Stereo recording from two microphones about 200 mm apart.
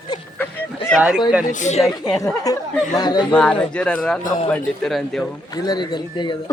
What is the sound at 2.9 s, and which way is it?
Speech, 20° left (ahead or behind).